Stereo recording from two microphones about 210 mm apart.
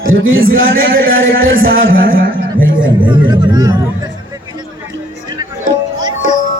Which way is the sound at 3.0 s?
20° right (ahead or behind).